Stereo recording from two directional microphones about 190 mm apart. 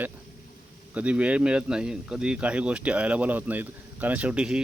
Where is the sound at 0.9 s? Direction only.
5° right (ahead or behind).